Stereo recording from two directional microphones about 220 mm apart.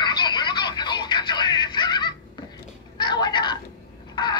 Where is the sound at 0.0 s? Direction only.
20° left (ahead or behind).